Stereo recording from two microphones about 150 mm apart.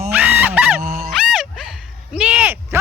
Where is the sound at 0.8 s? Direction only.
50° right (ahead or behind).